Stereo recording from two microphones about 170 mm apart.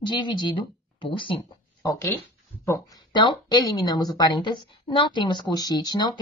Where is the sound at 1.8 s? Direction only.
15° left (ahead or behind).